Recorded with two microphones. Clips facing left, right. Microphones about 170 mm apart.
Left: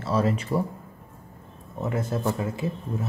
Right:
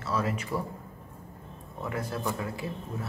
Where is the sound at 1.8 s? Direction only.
25° left (ahead or behind).